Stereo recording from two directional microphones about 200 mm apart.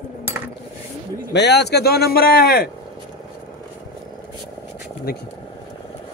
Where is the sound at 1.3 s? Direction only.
60° left (ahead or behind).